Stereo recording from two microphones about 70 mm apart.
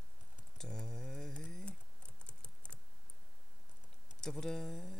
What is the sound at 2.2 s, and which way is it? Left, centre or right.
Typing, centre.